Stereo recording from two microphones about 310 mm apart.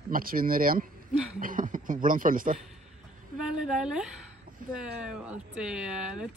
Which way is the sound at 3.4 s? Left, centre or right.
Centre.